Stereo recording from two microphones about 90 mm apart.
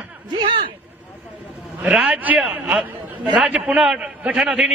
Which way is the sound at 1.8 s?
15° right (ahead or behind).